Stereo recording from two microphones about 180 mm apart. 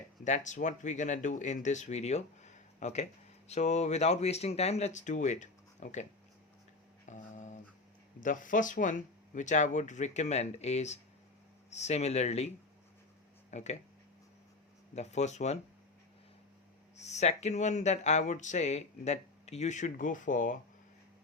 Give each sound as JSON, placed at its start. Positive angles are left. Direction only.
{"t": 0.3, "sound": "speech", "side_deg": 45}
{"t": 7.0, "sound": "dog", "side_deg": 40}
{"t": 8.2, "sound": "speech", "side_deg": 45}
{"t": 13.5, "sound": "speech", "side_deg": 40}
{"t": 14.9, "sound": "speech", "side_deg": 40}
{"t": 17.0, "sound": "speech", "side_deg": 40}